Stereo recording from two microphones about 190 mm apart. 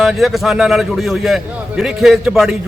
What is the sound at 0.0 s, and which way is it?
A man's voice, centre (ahead or behind).